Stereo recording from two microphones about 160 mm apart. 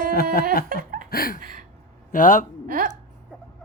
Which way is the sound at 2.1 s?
55° left (ahead or behind).